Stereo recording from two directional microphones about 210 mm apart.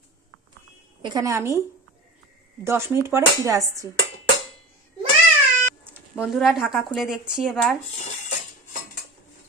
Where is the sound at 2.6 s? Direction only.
10° right (ahead or behind).